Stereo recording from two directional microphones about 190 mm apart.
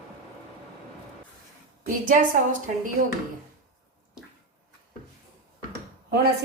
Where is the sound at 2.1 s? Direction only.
45° right (ahead or behind).